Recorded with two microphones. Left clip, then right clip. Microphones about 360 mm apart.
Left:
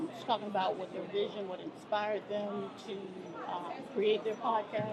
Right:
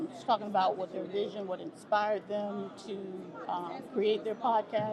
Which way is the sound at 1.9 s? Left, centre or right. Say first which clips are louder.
Right 4 dB; right.